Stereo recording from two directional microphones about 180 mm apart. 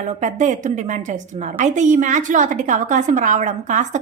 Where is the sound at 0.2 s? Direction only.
40° right (ahead or behind).